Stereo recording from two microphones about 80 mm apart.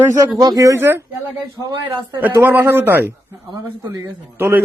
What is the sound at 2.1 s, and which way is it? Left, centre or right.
Speech, right.